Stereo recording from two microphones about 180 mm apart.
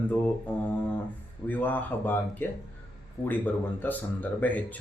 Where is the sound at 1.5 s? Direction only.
10° left (ahead or behind).